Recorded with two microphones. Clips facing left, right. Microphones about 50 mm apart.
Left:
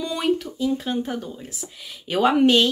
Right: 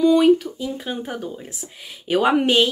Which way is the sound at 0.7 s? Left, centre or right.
Centre.